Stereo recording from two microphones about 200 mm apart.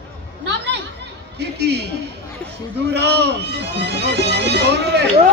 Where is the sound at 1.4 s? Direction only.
55° right (ahead or behind).